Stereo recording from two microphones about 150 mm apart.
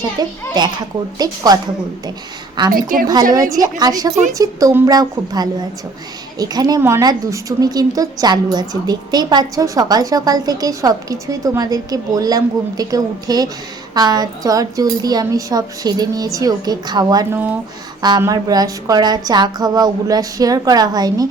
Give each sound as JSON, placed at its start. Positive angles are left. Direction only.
{"t": 0.0, "sound": "a woman's voice", "side_deg": -25}
{"t": 2.6, "sound": "a woman's voice", "side_deg": -30}
{"t": 17.3, "sound": "speech", "side_deg": -10}
{"t": 18.2, "sound": "a woman's voice", "side_deg": -25}